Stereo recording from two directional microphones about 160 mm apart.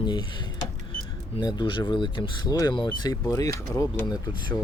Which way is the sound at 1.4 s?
25° left (ahead or behind).